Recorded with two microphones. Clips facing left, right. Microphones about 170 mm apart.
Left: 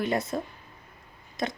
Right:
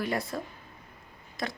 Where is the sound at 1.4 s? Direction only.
20° left (ahead or behind).